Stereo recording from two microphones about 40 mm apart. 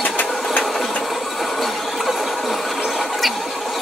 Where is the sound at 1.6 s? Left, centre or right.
Centre.